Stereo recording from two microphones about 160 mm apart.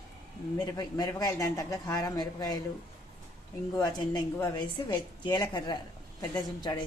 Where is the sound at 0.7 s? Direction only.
25° left (ahead or behind).